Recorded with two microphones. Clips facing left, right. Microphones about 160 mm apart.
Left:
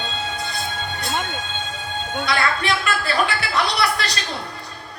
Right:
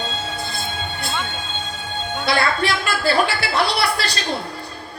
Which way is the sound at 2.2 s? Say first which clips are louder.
Right 3 dB; 30° right (ahead or behind).